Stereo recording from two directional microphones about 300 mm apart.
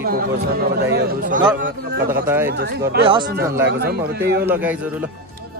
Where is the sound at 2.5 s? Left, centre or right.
Right.